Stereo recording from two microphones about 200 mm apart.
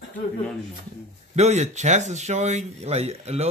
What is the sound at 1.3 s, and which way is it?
Speech, 35° right (ahead or behind).